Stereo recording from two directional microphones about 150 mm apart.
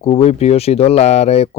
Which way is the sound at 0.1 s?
45° left (ahead or behind).